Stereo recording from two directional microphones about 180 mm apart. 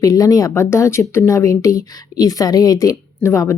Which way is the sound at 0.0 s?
20° left (ahead or behind).